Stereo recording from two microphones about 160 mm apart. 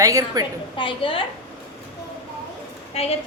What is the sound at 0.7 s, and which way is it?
Speech, 35° left (ahead or behind).